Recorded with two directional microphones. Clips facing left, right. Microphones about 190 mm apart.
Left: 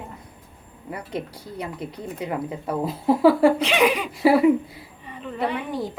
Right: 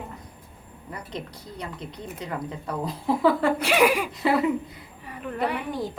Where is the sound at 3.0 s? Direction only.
30° left (ahead or behind).